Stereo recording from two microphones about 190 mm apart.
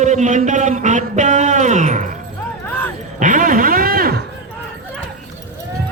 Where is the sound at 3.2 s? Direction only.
45° right (ahead or behind).